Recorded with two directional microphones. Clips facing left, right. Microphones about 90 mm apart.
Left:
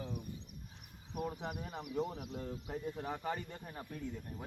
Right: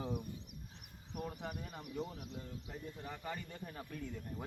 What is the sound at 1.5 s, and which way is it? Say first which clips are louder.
Speech: left 3 dB; 25° left (ahead or behind).